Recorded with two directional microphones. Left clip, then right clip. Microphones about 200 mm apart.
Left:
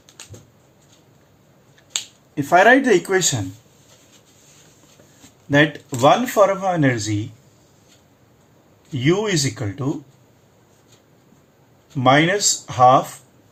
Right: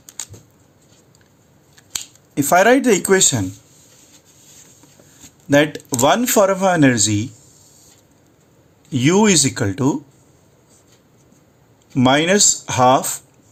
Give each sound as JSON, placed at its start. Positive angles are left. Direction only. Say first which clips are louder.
{"t": 2.3, "sound": "speech", "louder": "even", "side_deg": -55}
{"t": 5.5, "sound": "speech", "louder": "right 2 dB", "side_deg": -55}
{"t": 9.0, "sound": "speech", "louder": "right 5 dB", "side_deg": -75}
{"t": 11.9, "sound": "speech", "louder": "right 1 dB", "side_deg": -65}